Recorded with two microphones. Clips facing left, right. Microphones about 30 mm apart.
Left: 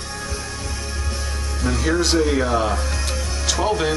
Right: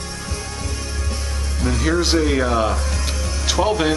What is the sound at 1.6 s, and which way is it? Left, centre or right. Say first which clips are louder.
Speech: right 1 dB; centre.